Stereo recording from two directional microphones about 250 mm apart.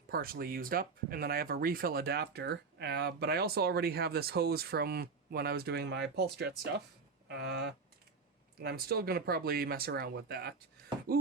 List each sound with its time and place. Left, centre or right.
0.1 s speech: right